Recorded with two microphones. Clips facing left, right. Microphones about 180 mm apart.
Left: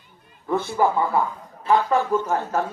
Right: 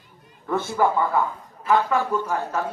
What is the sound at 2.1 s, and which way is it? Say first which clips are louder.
Speech: left 3 dB; 40° left (ahead or behind).